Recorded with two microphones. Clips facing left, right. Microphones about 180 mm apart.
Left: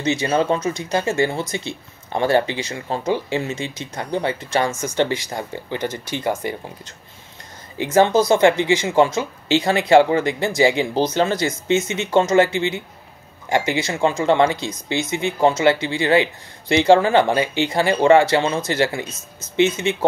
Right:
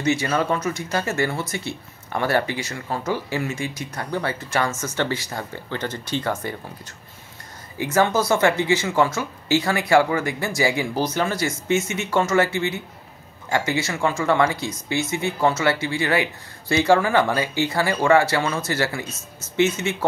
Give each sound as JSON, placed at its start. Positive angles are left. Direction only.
{"t": 0.0, "sound": "speech", "side_deg": 20}
{"t": 7.7, "sound": "speech", "side_deg": 20}